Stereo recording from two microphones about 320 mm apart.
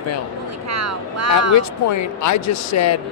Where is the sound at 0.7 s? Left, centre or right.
Right.